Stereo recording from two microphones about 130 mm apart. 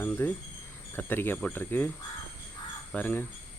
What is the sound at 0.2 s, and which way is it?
Speech, 15° left (ahead or behind).